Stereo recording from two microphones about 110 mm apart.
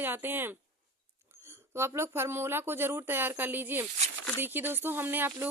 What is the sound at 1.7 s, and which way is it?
A woman's voice, 25° right (ahead or behind).